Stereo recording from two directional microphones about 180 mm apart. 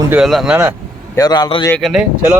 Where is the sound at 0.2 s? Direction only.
Centre (ahead or behind).